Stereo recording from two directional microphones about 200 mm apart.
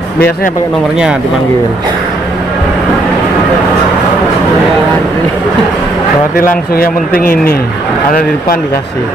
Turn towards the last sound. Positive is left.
turn(degrees=45)  # may be behind; listen again after turning